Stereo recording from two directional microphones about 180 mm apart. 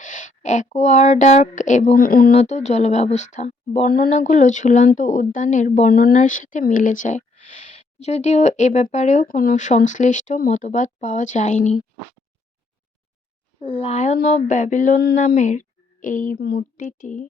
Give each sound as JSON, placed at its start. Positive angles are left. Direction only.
{"t": 0.0, "sound": "speech", "side_deg": 45}
{"t": 2.0, "sound": "speech", "side_deg": 55}
{"t": 2.3, "sound": "speech", "side_deg": 40}
{"t": 4.1, "sound": "speech", "side_deg": 45}
{"t": 13.8, "sound": "speech", "side_deg": 40}
{"t": 16.4, "sound": "speech", "side_deg": 65}
{"t": 16.7, "sound": "speech", "side_deg": 45}